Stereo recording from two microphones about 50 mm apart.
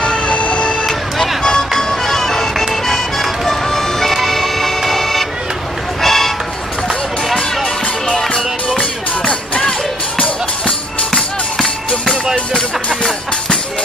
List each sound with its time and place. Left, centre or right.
0.0 s a sound: centre
0.8 s vehicle: centre
1.4 s music: centre
8.1 s music: centre
11.1 s music: centre